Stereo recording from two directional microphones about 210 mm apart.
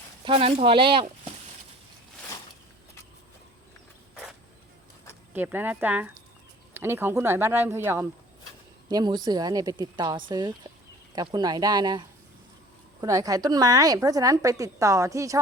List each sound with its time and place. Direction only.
0.3 s speech: 25° right (ahead or behind)
4.1 s creak: centre (ahead or behind)
5.3 s a woman's voice: 10° right (ahead or behind)